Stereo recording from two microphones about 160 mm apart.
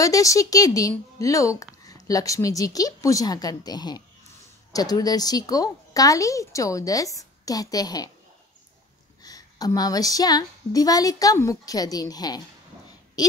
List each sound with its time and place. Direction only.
0.0 s a woman's voice: 20° left (ahead or behind)
9.2 s a woman's voice: 25° left (ahead or behind)